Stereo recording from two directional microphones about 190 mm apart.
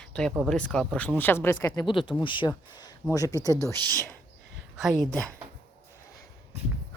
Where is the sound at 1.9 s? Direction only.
25° left (ahead or behind); by 4.1 s 10° left (ahead or behind).